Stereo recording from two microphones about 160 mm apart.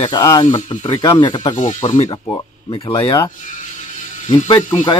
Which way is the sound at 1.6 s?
45° left (ahead or behind).